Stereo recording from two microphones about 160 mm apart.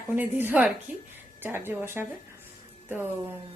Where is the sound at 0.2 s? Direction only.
10° right (ahead or behind).